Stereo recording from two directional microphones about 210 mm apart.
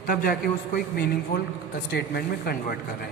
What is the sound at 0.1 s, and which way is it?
Speech, 45° left (ahead or behind).